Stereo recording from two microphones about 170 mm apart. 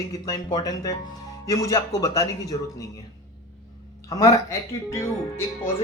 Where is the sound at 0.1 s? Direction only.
20° left (ahead or behind).